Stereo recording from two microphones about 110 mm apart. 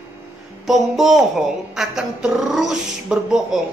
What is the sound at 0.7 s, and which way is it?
A woman's voice, centre (ahead or behind).